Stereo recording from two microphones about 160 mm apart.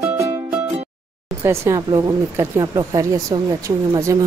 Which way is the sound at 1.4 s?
15° right (ahead or behind).